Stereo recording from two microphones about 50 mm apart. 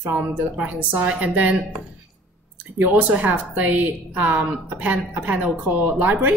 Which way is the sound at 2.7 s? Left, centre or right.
Right.